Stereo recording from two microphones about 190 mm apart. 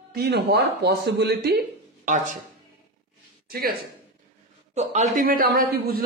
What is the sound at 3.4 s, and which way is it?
Speech, 55° right (ahead or behind).